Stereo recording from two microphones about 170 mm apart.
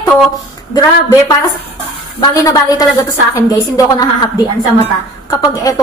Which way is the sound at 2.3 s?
20° left (ahead or behind).